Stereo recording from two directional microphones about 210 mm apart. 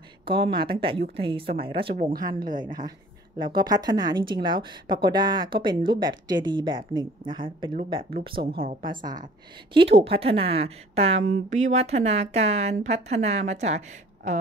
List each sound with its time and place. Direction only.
0.2 s speech: 25° right (ahead or behind)
9.8 s speech: 30° right (ahead or behind)